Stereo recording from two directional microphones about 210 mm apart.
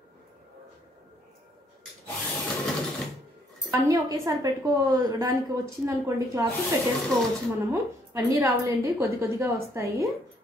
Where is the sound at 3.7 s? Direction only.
15° right (ahead or behind).